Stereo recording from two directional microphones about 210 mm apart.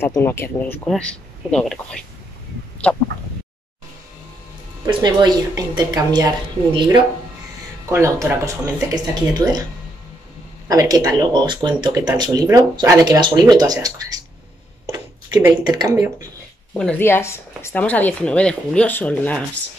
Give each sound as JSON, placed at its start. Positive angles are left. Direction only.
{"t": 0.0, "sound": "speech", "side_deg": 10}
{"t": 4.8, "sound": "a woman's voice", "side_deg": -20}
{"t": 10.7, "sound": "speech", "side_deg": -15}
{"t": 15.6, "sound": "a woman's voice", "side_deg": -20}
{"t": 16.7, "sound": "speech", "side_deg": 5}